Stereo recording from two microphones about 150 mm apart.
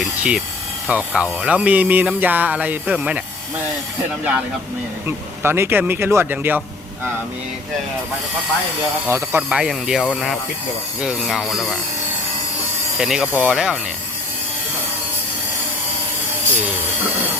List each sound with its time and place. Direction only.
0.0 s tools: 5° right (ahead or behind)
0.9 s speech: 10° right (ahead or behind)
5.0 s speech: 15° right (ahead or behind)
9.0 s speech: 15° right (ahead or behind)
9.5 s speech: 5° right (ahead or behind)
13.0 s speech: 5° right (ahead or behind)